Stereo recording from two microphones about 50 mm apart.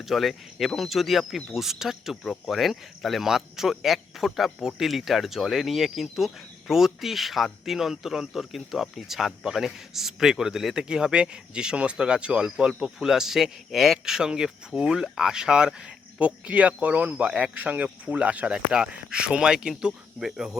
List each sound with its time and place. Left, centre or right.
0.0 s speech: centre
13.1 s speech: centre